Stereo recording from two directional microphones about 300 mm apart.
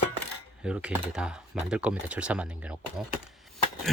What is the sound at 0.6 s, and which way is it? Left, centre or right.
Speech, centre.